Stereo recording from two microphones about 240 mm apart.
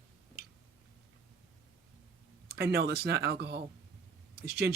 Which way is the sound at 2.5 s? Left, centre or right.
Right.